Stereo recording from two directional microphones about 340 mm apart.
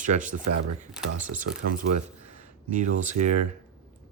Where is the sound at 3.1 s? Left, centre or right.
Right.